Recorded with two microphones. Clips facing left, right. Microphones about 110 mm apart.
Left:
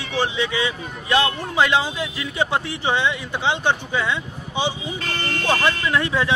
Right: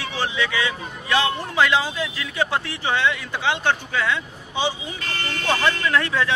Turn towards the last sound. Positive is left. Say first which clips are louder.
# left 1 dB
turn(degrees=20)  # may be behind; listen again after turning